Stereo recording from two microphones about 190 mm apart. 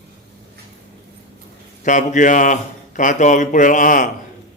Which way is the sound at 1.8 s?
40° left (ahead or behind).